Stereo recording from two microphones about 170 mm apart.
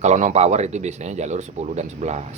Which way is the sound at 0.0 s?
45° right (ahead or behind).